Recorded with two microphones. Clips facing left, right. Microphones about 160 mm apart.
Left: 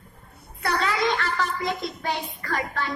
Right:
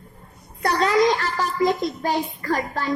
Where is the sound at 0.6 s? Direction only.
40° right (ahead or behind).